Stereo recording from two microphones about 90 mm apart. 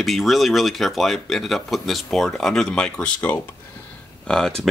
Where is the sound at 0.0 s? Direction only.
Centre (ahead or behind).